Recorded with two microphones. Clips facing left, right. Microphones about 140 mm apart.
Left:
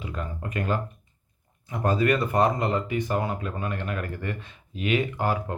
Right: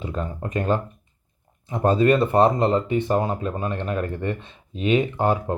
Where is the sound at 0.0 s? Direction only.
30° right (ahead or behind).